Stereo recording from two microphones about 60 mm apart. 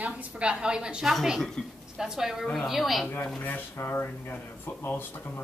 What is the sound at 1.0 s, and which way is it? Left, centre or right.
A woman's voice, centre.